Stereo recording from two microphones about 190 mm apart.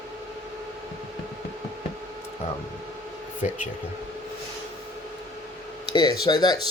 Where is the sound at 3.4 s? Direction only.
40° left (ahead or behind).